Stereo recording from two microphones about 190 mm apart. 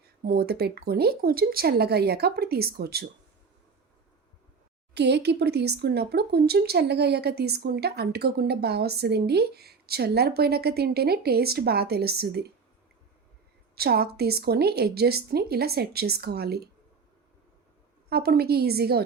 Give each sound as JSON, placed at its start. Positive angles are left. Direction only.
{"t": 0.2, "sound": "speech", "side_deg": -50}
{"t": 4.9, "sound": "speech", "side_deg": -65}
{"t": 13.7, "sound": "speech", "side_deg": -55}
{"t": 18.1, "sound": "speech", "side_deg": -55}